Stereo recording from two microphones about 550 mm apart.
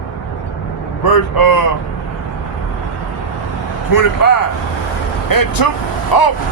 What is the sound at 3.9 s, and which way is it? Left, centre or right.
A man's voice, left.